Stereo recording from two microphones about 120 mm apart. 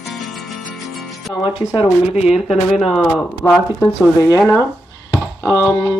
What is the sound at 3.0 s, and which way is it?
Speech, 20° left (ahead or behind).